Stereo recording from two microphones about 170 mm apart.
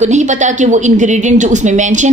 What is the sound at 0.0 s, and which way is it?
A woman's voice, 45° right (ahead or behind).